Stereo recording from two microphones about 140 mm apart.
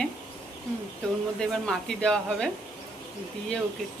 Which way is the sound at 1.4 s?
5° left (ahead or behind).